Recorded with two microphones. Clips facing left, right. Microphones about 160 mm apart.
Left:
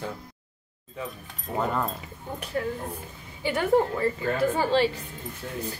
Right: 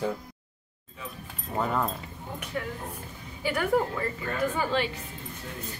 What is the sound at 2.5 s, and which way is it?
Speech, 40° left (ahead or behind).